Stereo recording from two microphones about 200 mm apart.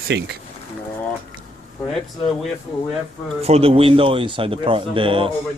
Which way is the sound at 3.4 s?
30° right (ahead or behind).